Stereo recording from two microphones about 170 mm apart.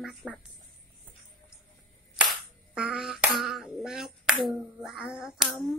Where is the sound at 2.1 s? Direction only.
5° right (ahead or behind).